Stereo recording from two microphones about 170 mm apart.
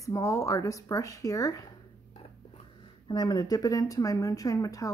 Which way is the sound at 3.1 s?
25° left (ahead or behind).